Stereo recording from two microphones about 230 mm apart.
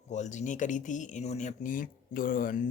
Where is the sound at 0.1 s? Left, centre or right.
Left.